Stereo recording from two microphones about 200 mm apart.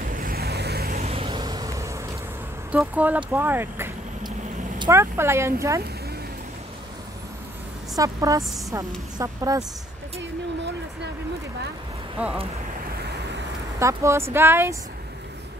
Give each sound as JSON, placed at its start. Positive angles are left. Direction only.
{"t": 0.0, "sound": "vehicle", "side_deg": -45}
{"t": 1.0, "sound": "a sound", "side_deg": -30}
{"t": 2.7, "sound": "speech", "side_deg": -5}
{"t": 7.9, "sound": "speech", "side_deg": -15}
{"t": 13.7, "sound": "speech", "side_deg": -15}